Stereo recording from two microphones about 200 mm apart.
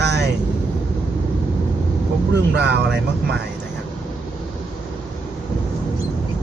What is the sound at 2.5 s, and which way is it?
Speech, 55° right (ahead or behind).